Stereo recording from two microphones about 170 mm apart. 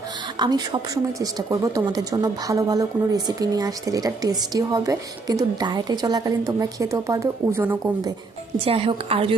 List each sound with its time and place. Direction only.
0.3 s speech: 25° right (ahead or behind)
8.5 s a woman's voice: 35° right (ahead or behind)